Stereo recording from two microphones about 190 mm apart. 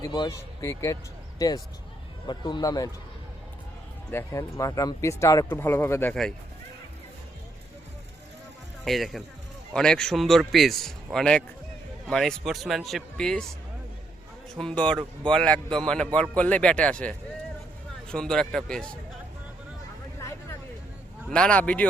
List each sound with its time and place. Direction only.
0.0 s speech: 20° left (ahead or behind)
4.1 s speech: 15° left (ahead or behind)
8.8 s a man's voice: centre (ahead or behind)
14.5 s a man's voice: 5° left (ahead or behind)
20.1 s a sound: 15° left (ahead or behind)
21.2 s speech: 5° left (ahead or behind)